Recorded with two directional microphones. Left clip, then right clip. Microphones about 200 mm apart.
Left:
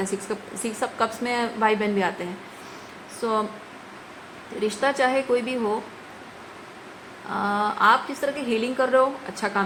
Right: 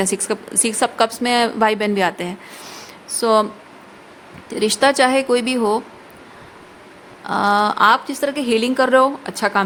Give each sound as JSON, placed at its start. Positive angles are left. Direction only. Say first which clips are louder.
{"t": 0.0, "sound": "a woman's voice", "louder": "right 7 dB", "side_deg": -55}
{"t": 4.6, "sound": "a woman's voice", "louder": "right 7 dB", "side_deg": -65}
{"t": 7.3, "sound": "a woman's voice", "louder": "right 8 dB", "side_deg": -60}